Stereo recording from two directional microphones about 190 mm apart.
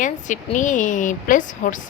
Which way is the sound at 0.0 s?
40° left (ahead or behind).